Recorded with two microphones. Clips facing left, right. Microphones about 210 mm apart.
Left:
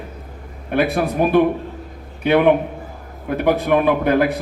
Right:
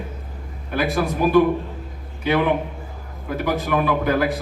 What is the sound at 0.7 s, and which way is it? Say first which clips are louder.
Speech: left 4 dB; 60° left (ahead or behind).